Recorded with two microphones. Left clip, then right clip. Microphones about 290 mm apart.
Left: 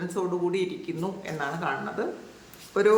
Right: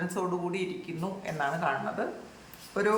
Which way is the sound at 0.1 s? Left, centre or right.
Centre.